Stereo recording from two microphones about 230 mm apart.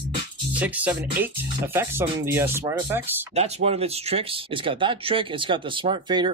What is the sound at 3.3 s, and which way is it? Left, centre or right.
Speech, right.